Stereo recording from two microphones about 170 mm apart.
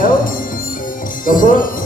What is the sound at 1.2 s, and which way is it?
Speech, 55° left (ahead or behind).